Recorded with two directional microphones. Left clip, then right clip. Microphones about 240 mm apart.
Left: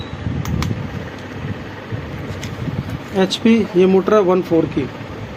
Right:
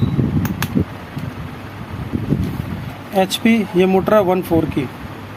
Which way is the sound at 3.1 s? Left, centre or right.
Right.